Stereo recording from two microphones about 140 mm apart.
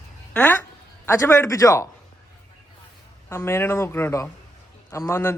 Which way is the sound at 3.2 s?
15° left (ahead or behind).